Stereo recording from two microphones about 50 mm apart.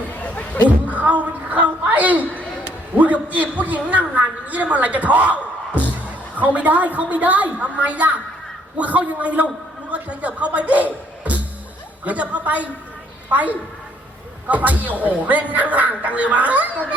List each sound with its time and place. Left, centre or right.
0.1 s chatter: left
0.9 s music: right
2.6 s a man's voice: right